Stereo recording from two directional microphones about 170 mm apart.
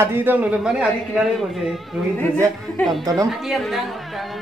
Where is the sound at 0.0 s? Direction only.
10° right (ahead or behind).